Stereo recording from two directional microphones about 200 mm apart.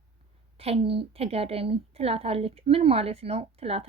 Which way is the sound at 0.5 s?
30° right (ahead or behind).